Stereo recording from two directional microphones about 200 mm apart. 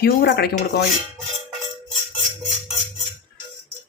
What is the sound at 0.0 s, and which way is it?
Dishes, 50° left (ahead or behind).